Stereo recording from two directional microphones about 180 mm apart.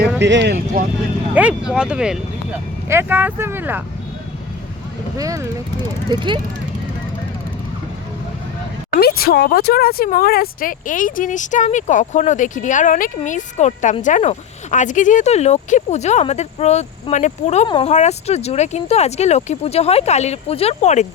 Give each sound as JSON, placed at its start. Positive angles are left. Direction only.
{"t": 0.2, "sound": "speech", "side_deg": -75}
{"t": 1.3, "sound": "speech", "side_deg": -10}
{"t": 5.1, "sound": "speech", "side_deg": -20}
{"t": 8.9, "sound": "speech", "side_deg": 60}